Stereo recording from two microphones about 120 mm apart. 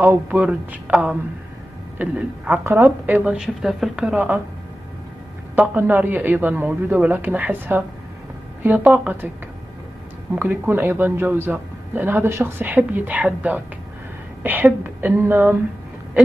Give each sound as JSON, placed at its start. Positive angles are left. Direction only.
{"t": 0.0, "sound": "a man's voice", "side_deg": -15}
{"t": 3.3, "sound": "a man's voice", "side_deg": -5}
{"t": 5.6, "sound": "a man's voice", "side_deg": -15}
{"t": 10.3, "sound": "a man's voice", "side_deg": -15}